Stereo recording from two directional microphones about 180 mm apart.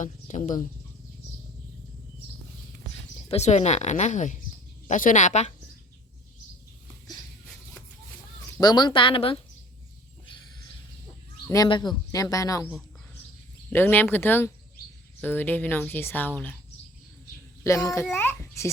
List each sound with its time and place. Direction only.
0.0 s a sound: 45° left (ahead or behind)
3.2 s a woman's voice: 35° left (ahead or behind)
8.6 s speech: 25° left (ahead or behind)
11.4 s speech: 20° left (ahead or behind)
13.7 s speech: 10° left (ahead or behind)
17.6 s a child's voice: 15° left (ahead or behind)
18.2 s babbling: 15° left (ahead or behind)